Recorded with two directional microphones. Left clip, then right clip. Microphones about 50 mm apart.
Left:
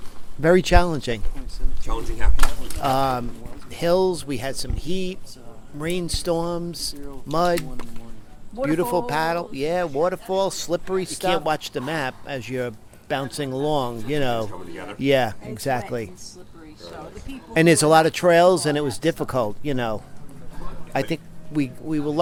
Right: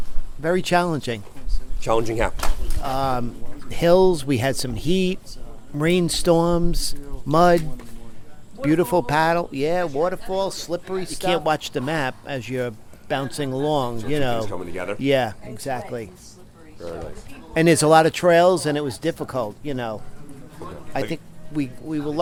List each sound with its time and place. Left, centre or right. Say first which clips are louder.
0.6 s speech: even; centre
2.8 s speech: left 5 dB; left
3.7 s speech: right 4 dB; right
4.4 s speech: right 6 dB; right
8.6 s speech: right 2 dB; centre
9.6 s speech: right 1 dB; centre
10.1 s speech: left 1 dB; left
11.2 s speech: right 3 dB; centre
15.5 s speech: left 3 dB; left
17.5 s speech: even; centre